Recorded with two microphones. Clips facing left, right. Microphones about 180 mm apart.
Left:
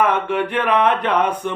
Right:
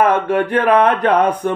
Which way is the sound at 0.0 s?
45° right (ahead or behind).